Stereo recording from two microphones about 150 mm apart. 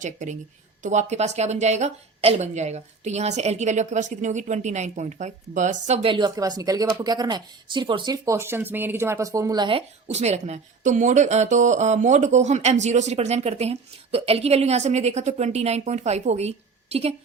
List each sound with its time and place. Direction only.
0.0 s speech: 55° right (ahead or behind)
6.0 s speech: 35° right (ahead or behind)
10.1 s speech: 45° right (ahead or behind)